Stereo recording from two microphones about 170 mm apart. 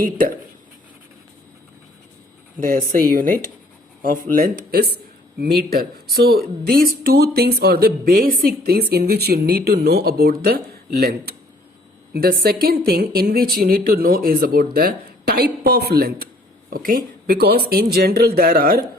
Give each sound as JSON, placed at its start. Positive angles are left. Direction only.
{"t": 0.0, "sound": "speech", "side_deg": -55}
{"t": 2.6, "sound": "speech", "side_deg": -55}